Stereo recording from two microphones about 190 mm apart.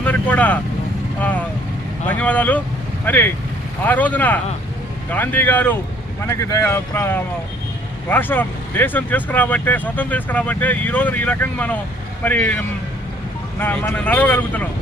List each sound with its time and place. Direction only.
0.0 s vehicle: 5° left (ahead or behind)
1.2 s speech: 10° left (ahead or behind)